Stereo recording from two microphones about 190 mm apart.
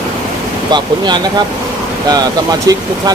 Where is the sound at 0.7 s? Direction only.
25° right (ahead or behind).